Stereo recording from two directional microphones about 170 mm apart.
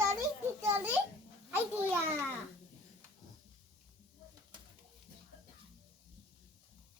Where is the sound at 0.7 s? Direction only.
10° right (ahead or behind).